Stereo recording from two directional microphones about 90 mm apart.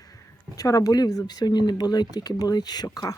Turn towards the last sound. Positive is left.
turn(degrees=45)  # may be behind; listen again after turning